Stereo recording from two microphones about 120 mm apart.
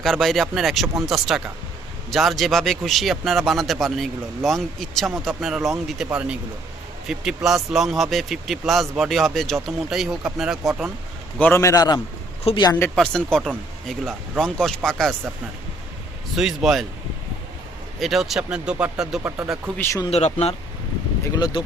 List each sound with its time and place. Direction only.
0.0 s a man's voice: centre (ahead or behind)
11.3 s a man's voice: 15° left (ahead or behind)
12.5 s speech: 55° left (ahead or behind)
13.0 s a man's voice: 5° left (ahead or behind)
16.3 s a man's voice: 5° right (ahead or behind)
18.0 s a man's voice: centre (ahead or behind)
19.8 s a man's voice: 25° left (ahead or behind)
20.1 s speech: 60° left (ahead or behind)
21.3 s speech: 35° left (ahead or behind)